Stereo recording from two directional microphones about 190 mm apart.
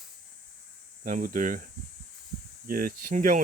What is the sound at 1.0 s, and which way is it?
Speech, 45° right (ahead or behind).